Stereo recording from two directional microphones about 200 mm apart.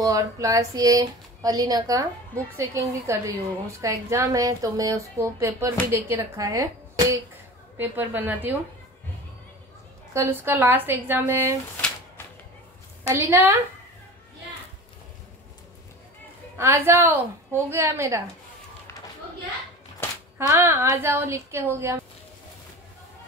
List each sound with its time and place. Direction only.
0.0 s a woman's voice: 15° right (ahead or behind)
10.1 s a woman's voice: 15° right (ahead or behind)
13.1 s a woman's voice: 10° right (ahead or behind)
16.5 s a woman's voice: 10° right (ahead or behind)
20.3 s a woman's voice: 10° right (ahead or behind)